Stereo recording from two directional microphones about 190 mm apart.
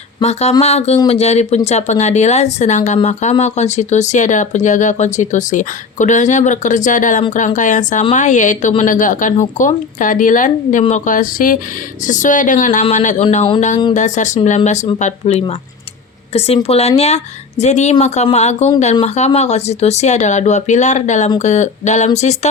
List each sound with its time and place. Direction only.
0.2 s a woman's voice: 35° left (ahead or behind)